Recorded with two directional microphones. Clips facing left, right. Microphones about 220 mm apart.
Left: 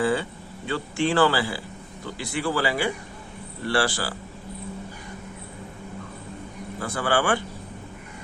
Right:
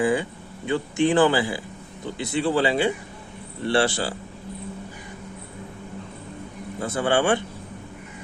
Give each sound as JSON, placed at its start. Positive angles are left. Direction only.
{"t": 0.0, "sound": "speech", "side_deg": -15}
{"t": 6.7, "sound": "speech", "side_deg": -20}